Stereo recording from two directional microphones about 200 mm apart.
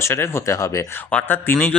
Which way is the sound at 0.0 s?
10° left (ahead or behind).